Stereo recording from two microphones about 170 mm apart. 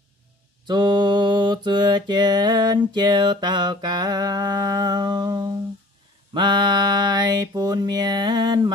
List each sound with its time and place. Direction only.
0.7 s mantra: 25° right (ahead or behind)